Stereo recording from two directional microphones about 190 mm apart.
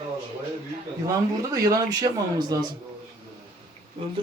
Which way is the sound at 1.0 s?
20° right (ahead or behind).